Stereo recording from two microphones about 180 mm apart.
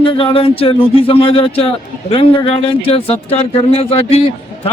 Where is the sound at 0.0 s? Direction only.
30° left (ahead or behind).